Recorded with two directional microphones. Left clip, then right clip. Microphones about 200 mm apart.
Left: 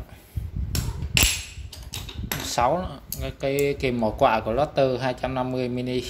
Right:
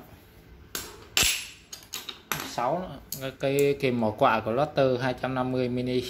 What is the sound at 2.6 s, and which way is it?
Speech, 35° left (ahead or behind).